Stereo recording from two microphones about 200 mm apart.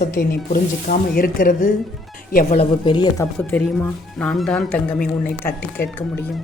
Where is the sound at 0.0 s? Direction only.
50° left (ahead or behind).